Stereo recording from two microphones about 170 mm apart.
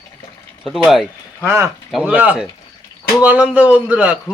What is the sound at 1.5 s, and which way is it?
Speech, 15° right (ahead or behind).